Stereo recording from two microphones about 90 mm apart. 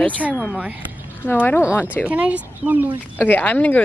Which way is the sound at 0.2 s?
15° right (ahead or behind).